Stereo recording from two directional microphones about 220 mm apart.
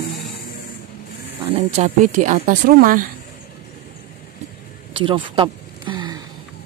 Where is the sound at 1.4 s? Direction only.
25° right (ahead or behind).